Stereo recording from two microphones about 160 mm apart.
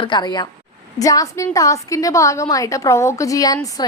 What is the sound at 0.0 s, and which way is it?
A woman's voice, 30° left (ahead or behind).